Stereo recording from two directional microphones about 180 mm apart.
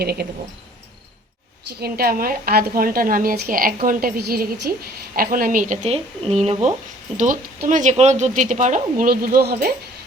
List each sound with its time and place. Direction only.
0.0 s a woman's voice: 60° right (ahead or behind)
1.8 s a woman's voice: 55° right (ahead or behind); by 6.7 s 35° right (ahead or behind)
7.2 s speech: 45° right (ahead or behind)